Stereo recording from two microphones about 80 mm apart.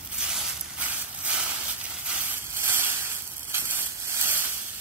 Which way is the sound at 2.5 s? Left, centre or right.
Right.